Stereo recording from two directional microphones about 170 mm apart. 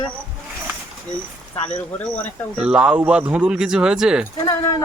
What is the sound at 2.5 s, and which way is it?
Speech, 5° right (ahead or behind).